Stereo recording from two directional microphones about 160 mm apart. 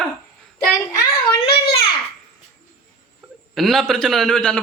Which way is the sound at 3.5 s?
Centre (ahead or behind).